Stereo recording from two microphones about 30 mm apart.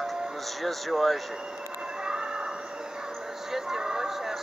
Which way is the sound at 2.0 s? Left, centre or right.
Right.